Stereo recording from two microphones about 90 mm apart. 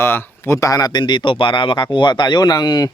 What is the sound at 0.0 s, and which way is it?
Speech, 25° left (ahead or behind).